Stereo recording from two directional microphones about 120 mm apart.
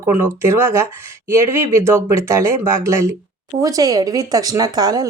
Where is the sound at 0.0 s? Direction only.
20° right (ahead or behind).